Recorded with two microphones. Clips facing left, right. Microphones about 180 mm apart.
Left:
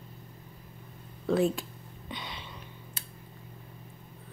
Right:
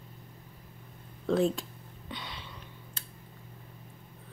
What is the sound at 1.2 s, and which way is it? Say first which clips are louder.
Speech: left 1 dB; 5° left (ahead or behind).